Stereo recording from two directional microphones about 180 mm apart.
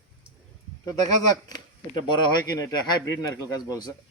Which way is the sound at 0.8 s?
20° left (ahead or behind).